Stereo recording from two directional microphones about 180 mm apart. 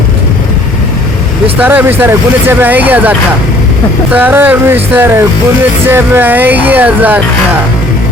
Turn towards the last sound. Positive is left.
turn(degrees=-10)  # may be behind; listen again after turning